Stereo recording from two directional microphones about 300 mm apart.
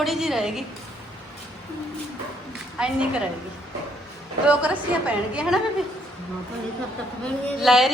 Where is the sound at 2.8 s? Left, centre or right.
Centre.